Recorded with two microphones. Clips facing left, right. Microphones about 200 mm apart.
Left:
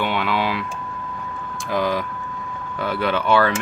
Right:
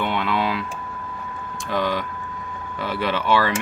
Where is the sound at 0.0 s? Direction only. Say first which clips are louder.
Left 1 dB; centre (ahead or behind).